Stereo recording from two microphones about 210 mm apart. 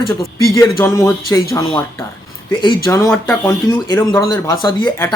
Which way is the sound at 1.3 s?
15° left (ahead or behind).